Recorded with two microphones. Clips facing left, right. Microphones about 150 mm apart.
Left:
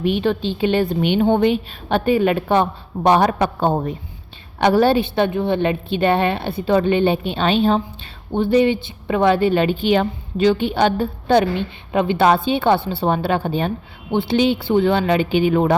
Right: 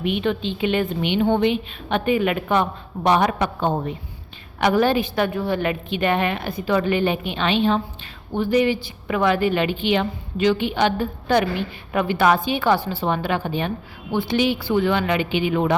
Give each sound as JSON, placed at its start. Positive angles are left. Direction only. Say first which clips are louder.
{"t": 0.0, "sound": "a woman's voice", "louder": "left 3 dB", "side_deg": 35}